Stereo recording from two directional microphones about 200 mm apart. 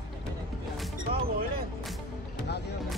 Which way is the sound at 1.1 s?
50° right (ahead or behind).